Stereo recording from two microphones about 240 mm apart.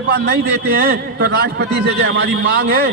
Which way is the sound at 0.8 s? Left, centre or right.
Right.